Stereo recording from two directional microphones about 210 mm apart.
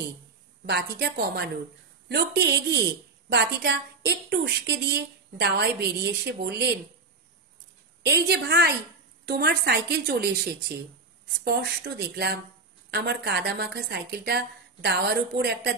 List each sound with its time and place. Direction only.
0.7 s a woman's voice: 50° right (ahead or behind)
8.0 s a woman's voice: 50° right (ahead or behind)